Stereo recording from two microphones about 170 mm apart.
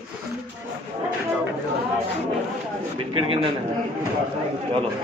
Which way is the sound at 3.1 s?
30° right (ahead or behind).